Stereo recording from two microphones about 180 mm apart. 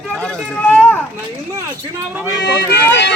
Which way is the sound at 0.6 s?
10° left (ahead or behind).